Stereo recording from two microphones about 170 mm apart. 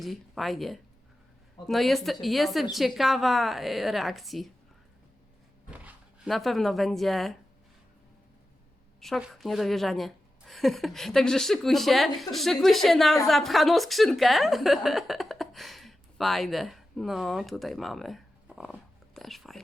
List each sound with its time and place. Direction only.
0.0 s a woman's voice: centre (ahead or behind)
5.7 s speech: 5° right (ahead or behind)
9.0 s a woman's voice: centre (ahead or behind)